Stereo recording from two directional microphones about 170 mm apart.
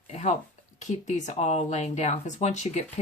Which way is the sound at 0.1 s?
40° left (ahead or behind).